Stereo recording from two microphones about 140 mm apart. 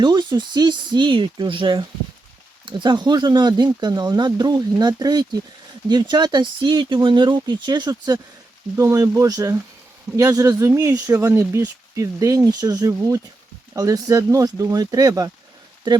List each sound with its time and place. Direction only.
0.0 s speech: 30° right (ahead or behind)